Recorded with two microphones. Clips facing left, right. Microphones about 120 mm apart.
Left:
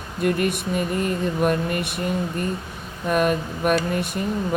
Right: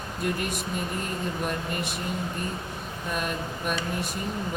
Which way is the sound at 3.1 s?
60° left (ahead or behind).